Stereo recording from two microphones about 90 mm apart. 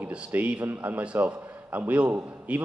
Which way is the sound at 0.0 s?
15° right (ahead or behind).